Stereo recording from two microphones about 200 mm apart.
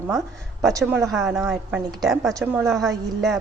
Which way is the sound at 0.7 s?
15° right (ahead or behind).